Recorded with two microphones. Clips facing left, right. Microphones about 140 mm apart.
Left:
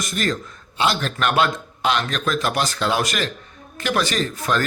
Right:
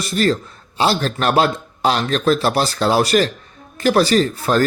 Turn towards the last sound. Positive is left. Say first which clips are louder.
# right 6 dB
turn(degrees=-35)  # may be behind; listen again after turning